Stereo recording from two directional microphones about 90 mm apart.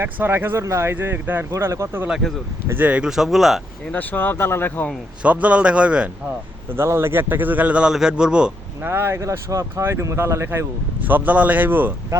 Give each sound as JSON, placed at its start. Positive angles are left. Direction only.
{"t": 0.0, "sound": "a man's voice", "side_deg": -25}
{"t": 3.9, "sound": "speech", "side_deg": 20}
{"t": 5.2, "sound": "a man's voice", "side_deg": -15}
{"t": 6.7, "sound": "a man's voice", "side_deg": -25}
{"t": 8.8, "sound": "speech", "side_deg": -25}
{"t": 11.0, "sound": "a man's voice", "side_deg": -20}